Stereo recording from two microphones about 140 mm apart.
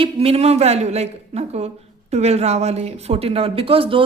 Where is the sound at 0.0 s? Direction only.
45° right (ahead or behind).